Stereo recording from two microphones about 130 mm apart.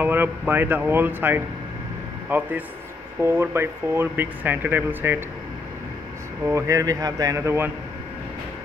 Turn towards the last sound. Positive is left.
turn(degrees=-20)  # may be behind; listen again after turning